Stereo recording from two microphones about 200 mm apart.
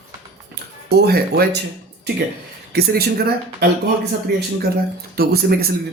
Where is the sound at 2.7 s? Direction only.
50° right (ahead or behind).